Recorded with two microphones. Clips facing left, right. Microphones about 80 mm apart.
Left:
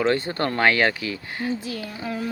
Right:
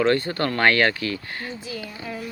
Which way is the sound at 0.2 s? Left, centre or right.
Left.